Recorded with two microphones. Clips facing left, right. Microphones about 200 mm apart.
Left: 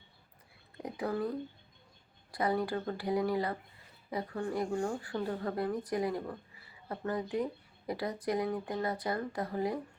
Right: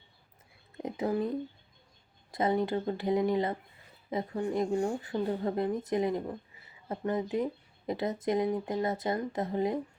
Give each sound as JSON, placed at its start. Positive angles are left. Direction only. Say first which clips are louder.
{"t": 0.8, "sound": "speech", "louder": "right 4 dB", "side_deg": -25}